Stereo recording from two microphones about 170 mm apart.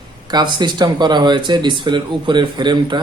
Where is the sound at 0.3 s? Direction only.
25° right (ahead or behind).